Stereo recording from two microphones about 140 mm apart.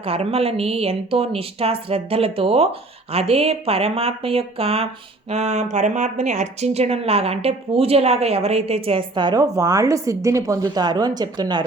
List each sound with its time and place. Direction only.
0.0 s speech: 45° right (ahead or behind); by 11.6 s 30° right (ahead or behind)